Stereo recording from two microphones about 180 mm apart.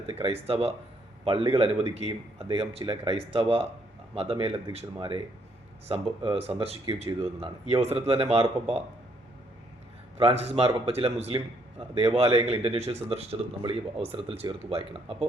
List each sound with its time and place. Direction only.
0.1 s a man's voice: 30° right (ahead or behind)
10.2 s a man's voice: 35° right (ahead or behind)